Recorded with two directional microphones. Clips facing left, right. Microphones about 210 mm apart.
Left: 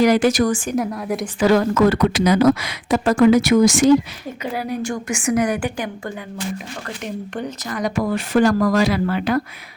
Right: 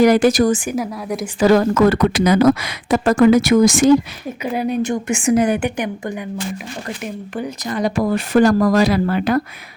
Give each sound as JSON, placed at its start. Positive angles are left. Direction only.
{"t": 0.0, "sound": "speech", "side_deg": -45}
{"t": 0.7, "sound": "a woman's voice", "side_deg": 0}
{"t": 1.4, "sound": "speech", "side_deg": -40}
{"t": 4.4, "sound": "a woman's voice", "side_deg": -20}
{"t": 7.7, "sound": "speech", "side_deg": -30}